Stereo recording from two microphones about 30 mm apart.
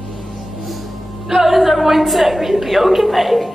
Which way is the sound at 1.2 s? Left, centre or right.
Centre.